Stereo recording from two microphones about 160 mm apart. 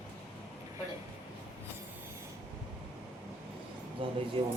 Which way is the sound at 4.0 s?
35° right (ahead or behind).